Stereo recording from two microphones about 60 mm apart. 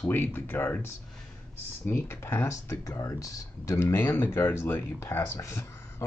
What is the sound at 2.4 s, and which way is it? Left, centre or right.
Speech, left.